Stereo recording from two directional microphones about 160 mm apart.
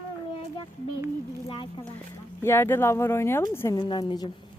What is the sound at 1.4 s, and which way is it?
Speech, 35° left (ahead or behind).